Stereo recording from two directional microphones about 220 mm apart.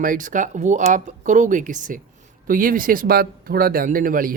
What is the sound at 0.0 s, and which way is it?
Speech, 35° right (ahead or behind).